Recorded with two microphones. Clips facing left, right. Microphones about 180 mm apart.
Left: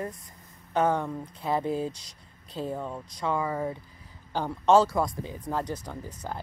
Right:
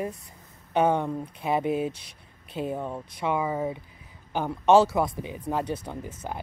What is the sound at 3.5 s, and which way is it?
Speech, 5° right (ahead or behind).